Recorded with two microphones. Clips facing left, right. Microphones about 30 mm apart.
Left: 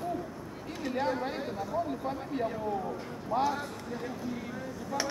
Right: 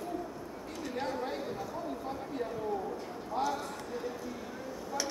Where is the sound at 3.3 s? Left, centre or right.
Left.